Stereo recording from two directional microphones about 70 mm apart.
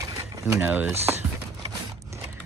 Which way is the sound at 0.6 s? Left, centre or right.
Right.